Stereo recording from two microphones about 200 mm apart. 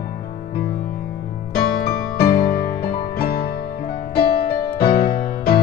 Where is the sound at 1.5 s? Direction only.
50° left (ahead or behind).